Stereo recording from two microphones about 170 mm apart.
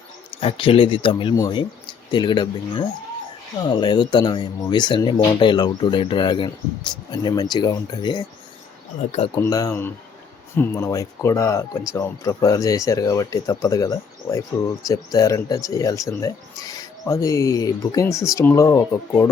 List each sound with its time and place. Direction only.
0.3 s speech: 30° left (ahead or behind)
9.3 s speech: 20° left (ahead or behind)